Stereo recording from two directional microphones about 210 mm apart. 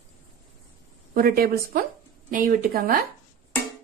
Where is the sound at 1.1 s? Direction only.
45° right (ahead or behind).